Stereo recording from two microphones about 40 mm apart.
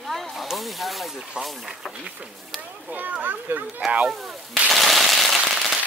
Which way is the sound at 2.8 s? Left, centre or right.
Right.